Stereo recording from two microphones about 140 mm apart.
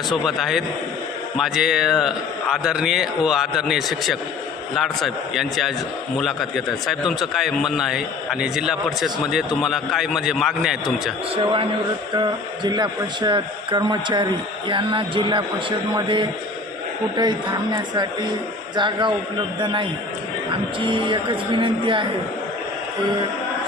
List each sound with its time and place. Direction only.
0.1 s a man's voice: centre (ahead or behind)
12.1 s speech: 30° right (ahead or behind)